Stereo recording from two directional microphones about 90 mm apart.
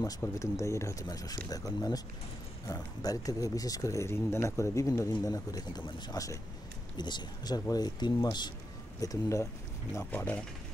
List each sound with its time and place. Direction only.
0.2 s speech: 35° left (ahead or behind); by 8.5 s 55° left (ahead or behind)
9.0 s speech: 40° left (ahead or behind)
10.1 s speech: 20° left (ahead or behind)